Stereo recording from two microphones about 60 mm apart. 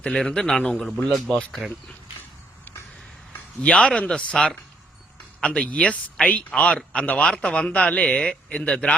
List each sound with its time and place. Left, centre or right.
0.1 s speech: centre
3.6 s speech: centre